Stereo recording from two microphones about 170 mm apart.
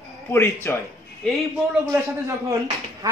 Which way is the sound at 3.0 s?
20° right (ahead or behind).